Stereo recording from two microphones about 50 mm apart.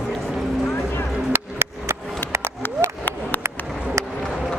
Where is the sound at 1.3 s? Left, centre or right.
Right.